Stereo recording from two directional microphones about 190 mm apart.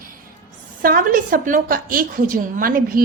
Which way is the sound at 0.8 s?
45° right (ahead or behind).